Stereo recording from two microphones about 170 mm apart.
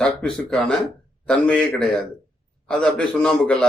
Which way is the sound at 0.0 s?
5° left (ahead or behind).